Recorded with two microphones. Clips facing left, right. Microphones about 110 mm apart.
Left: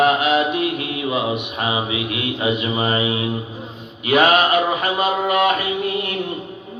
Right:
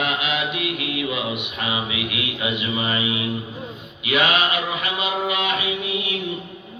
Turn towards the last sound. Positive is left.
turn(degrees=50)  # may be behind; listen again after turning